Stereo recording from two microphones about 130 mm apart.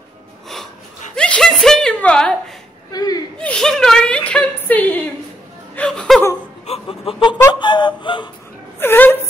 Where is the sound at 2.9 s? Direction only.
30° left (ahead or behind).